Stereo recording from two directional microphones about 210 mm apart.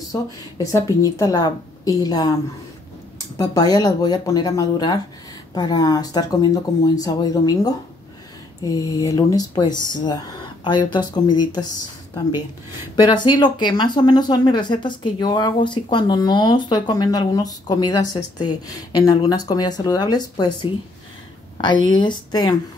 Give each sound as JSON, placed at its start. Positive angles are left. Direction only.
{"t": 0.1, "sound": "a woman's voice", "side_deg": 15}
{"t": 3.3, "sound": "a woman's voice", "side_deg": 20}
{"t": 12.9, "sound": "speech", "side_deg": 20}